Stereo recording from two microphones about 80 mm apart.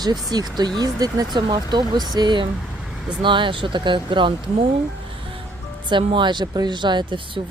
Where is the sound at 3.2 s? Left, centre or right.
Right.